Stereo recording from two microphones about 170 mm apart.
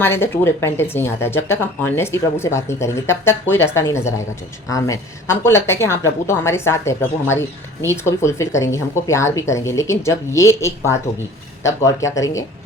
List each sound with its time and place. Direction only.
0.0 s a woman's voice: 15° left (ahead or behind)